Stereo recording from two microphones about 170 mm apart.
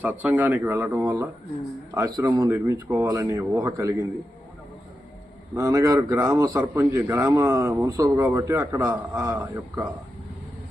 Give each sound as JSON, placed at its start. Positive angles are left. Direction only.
{"t": 0.0, "sound": "a man's voice", "side_deg": -10}
{"t": 5.5, "sound": "a man's voice", "side_deg": -20}